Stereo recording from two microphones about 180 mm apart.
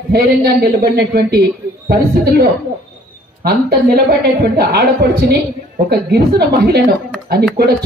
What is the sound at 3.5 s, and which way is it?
A woman's voice, 60° right (ahead or behind).